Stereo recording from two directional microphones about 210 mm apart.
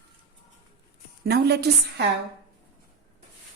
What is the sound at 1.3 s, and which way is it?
Speech, 50° right (ahead or behind).